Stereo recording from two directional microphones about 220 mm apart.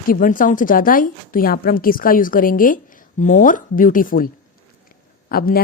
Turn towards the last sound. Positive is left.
turn(degrees=45)  # may be behind; listen again after turning